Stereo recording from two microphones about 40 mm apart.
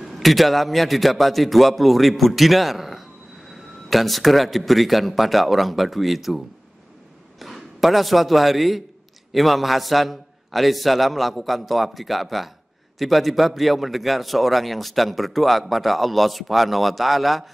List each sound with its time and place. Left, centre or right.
0.1 s a man's voice: centre